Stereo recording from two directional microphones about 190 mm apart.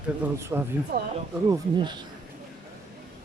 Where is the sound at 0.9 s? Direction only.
60° right (ahead or behind).